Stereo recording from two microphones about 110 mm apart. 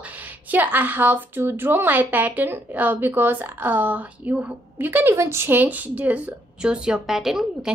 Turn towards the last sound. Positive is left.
turn(degrees=-5)  # may be behind; listen again after turning